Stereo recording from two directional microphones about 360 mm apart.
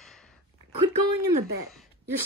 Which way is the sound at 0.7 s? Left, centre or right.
Right.